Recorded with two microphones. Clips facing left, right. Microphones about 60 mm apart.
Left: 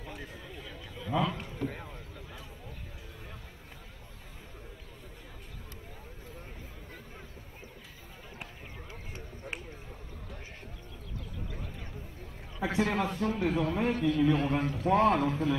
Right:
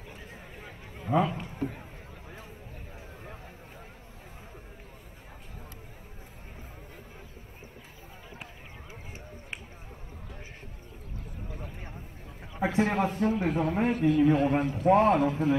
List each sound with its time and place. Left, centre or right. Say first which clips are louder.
0.0 s chatter: left 3 dB; left
0.3 s chatter: left 1 dB; right
1.3 s a sound: right 2 dB; right
12.5 s a man's voice: right 3 dB; right